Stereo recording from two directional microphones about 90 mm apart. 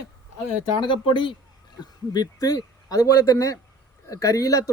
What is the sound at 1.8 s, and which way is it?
Speech, 45° left (ahead or behind).